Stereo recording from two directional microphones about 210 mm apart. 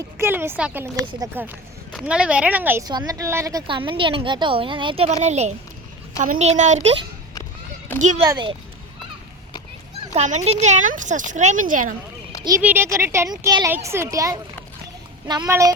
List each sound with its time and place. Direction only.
0.2 s a sound: 10° right (ahead or behind)
1.4 s a woman's voice: 5° right (ahead or behind); by 8.2 s 35° right (ahead or behind)
8.2 s a woman's voice: 20° right (ahead or behind)
10.2 s speech: 35° right (ahead or behind)
12.5 s speech: 10° right (ahead or behind)